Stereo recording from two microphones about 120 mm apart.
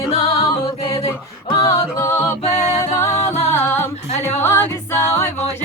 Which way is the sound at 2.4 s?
65° left (ahead or behind).